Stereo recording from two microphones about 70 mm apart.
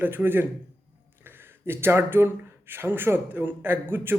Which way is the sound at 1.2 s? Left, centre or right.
Right.